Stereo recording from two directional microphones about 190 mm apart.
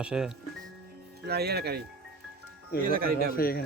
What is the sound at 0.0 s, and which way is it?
Speech, 5° right (ahead or behind).